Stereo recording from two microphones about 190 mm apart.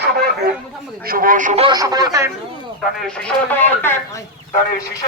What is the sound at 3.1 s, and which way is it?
Speech, 5° left (ahead or behind).